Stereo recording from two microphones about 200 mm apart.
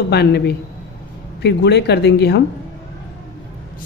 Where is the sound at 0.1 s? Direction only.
55° left (ahead or behind).